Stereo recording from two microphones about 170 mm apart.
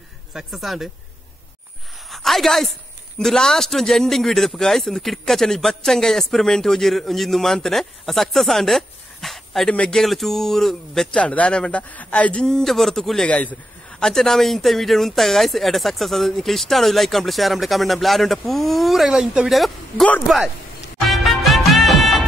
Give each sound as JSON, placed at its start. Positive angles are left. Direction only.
{"t": 0.3, "sound": "speech", "side_deg": 0}
{"t": 2.0, "sound": "a sound", "side_deg": 0}
{"t": 3.2, "sound": "speech", "side_deg": 5}
{"t": 21.1, "sound": "music", "side_deg": 0}